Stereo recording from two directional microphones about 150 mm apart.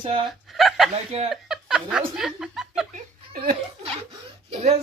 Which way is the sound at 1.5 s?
5° right (ahead or behind).